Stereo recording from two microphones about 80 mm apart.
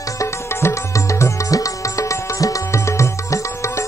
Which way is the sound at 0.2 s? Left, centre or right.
Left.